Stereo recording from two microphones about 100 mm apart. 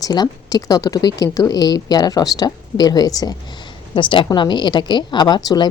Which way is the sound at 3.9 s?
55° left (ahead or behind).